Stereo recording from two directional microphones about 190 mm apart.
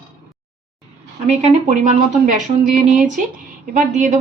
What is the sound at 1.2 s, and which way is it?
A woman's voice, 35° right (ahead or behind).